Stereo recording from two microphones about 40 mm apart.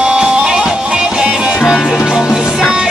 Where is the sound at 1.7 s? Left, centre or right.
Centre.